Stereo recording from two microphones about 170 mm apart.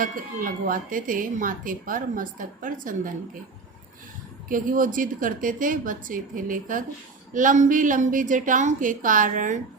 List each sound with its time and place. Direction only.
0.0 s speech: 55° right (ahead or behind)
4.4 s speech: 55° right (ahead or behind)